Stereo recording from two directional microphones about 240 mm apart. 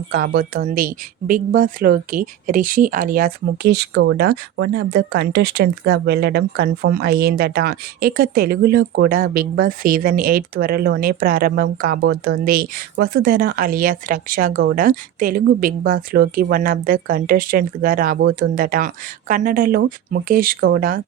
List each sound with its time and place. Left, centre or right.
0.1 s speech: right